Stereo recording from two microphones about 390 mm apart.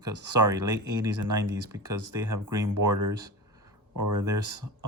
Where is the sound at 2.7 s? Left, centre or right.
Right.